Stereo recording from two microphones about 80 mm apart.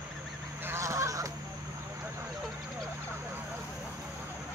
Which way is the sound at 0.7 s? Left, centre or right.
Right.